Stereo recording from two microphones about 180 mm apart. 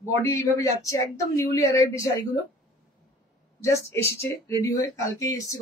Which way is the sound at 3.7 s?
15° left (ahead or behind).